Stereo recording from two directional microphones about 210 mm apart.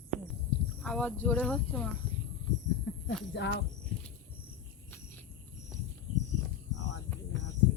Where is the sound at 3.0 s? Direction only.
55° left (ahead or behind).